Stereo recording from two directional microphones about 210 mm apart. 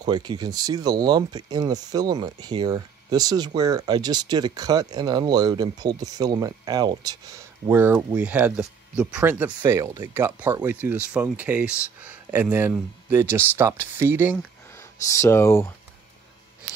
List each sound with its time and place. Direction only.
0.0 s speech: 20° right (ahead or behind)
14.8 s speech: 15° left (ahead or behind)